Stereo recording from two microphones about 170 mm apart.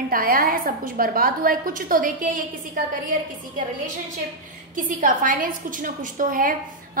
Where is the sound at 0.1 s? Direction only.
55° right (ahead or behind).